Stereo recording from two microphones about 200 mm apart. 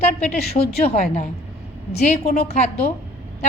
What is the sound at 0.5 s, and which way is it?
A woman's voice, 30° left (ahead or behind).